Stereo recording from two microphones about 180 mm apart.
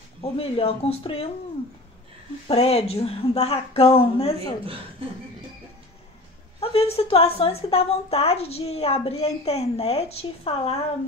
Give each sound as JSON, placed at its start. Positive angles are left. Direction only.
{"t": 0.2, "sound": "a woman's voice", "side_deg": 30}
{"t": 2.4, "sound": "a woman's voice", "side_deg": 35}
{"t": 6.6, "sound": "a woman's voice", "side_deg": 35}